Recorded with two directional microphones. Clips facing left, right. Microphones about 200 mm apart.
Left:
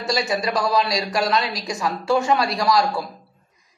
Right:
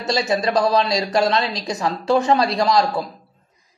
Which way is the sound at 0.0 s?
20° right (ahead or behind).